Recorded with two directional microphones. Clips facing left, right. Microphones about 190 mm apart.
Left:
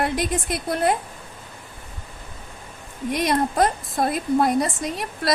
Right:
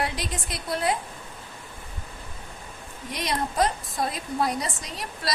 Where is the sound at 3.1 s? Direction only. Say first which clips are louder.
Left 5 dB; 55° left (ahead or behind).